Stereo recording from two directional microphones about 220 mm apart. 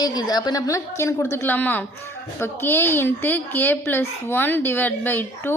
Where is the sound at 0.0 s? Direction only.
15° left (ahead or behind).